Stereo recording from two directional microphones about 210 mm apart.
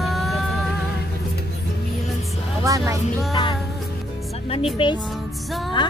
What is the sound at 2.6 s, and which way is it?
Speech, 15° right (ahead or behind).